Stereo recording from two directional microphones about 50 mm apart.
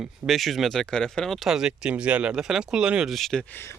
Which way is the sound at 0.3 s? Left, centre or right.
Centre.